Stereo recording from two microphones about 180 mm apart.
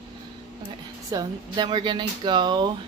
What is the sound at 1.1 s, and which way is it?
Speech, 20° right (ahead or behind).